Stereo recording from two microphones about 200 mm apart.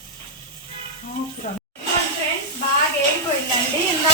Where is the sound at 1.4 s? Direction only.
35° left (ahead or behind).